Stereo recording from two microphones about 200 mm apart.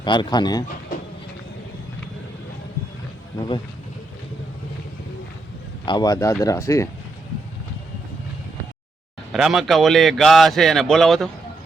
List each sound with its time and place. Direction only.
0.0 s speech: 25° left (ahead or behind)
3.3 s speech: 25° left (ahead or behind)
5.8 s speech: 20° left (ahead or behind)
9.3 s a man's voice: centre (ahead or behind)